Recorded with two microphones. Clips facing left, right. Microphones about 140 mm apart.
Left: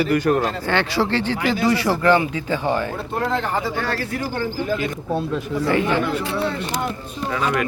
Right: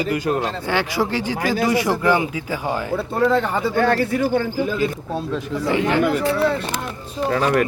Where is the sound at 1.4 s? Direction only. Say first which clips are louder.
Even; 40° right (ahead or behind).